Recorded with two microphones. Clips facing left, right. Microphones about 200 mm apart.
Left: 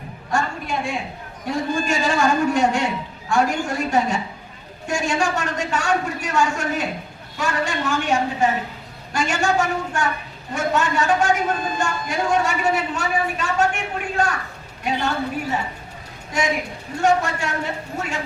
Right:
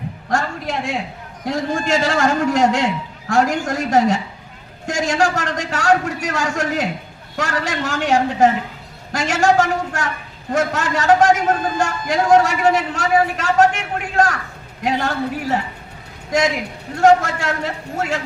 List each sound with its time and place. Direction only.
0.3 s a man's voice: 90° right
17.0 s a man's voice: 90° right